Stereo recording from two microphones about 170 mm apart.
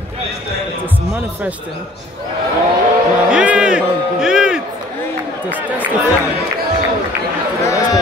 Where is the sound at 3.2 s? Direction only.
5° right (ahead or behind).